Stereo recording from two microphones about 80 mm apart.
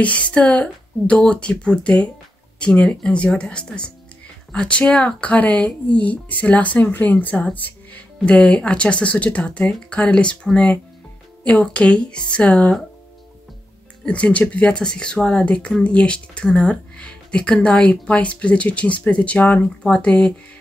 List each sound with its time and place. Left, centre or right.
0.0 s speech: centre
14.0 s speech: centre